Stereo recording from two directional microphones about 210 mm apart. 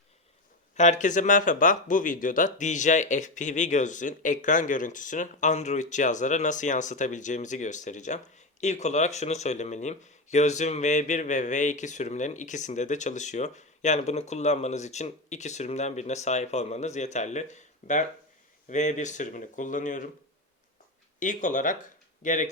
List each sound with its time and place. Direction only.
0.8 s speech: 35° left (ahead or behind)
21.2 s speech: 35° left (ahead or behind)